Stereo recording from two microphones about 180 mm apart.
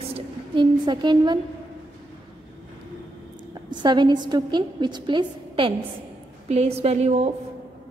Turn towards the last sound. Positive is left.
turn(degrees=-35)  # may be behind; listen again after turning